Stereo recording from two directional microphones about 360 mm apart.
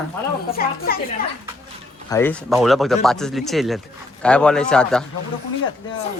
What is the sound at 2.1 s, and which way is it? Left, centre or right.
Speech, centre.